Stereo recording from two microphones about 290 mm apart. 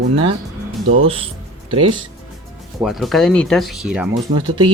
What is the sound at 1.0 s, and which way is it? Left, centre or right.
Speech, centre.